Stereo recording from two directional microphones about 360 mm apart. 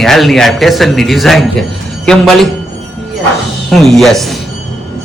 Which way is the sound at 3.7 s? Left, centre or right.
Centre.